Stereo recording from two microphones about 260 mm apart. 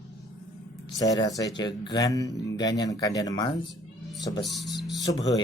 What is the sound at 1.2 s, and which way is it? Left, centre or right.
Speech, centre.